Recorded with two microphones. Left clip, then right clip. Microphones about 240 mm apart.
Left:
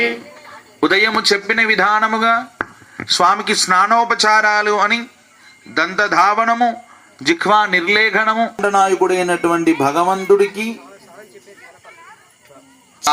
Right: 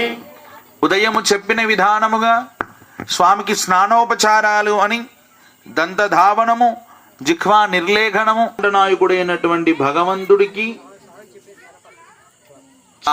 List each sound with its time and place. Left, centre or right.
0.8 s speech: right
8.6 s speech: left